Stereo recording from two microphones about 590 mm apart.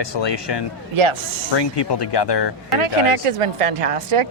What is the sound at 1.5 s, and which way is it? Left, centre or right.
Speech, left.